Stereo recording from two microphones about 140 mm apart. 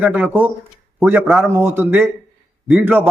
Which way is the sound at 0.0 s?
10° right (ahead or behind).